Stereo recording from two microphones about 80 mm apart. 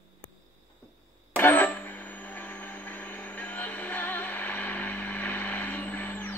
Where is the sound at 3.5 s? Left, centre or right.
Left.